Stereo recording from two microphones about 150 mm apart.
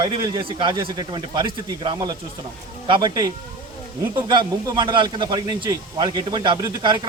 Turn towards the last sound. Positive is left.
turn(degrees=-30)  # may be behind; listen again after turning